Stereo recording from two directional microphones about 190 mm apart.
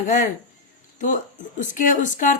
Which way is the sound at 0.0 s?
45° left (ahead or behind).